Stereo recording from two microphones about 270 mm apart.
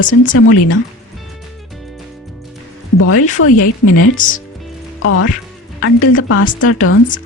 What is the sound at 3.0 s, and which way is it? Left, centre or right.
Speech, left.